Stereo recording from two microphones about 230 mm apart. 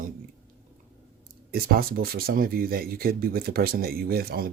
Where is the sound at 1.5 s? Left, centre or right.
Right.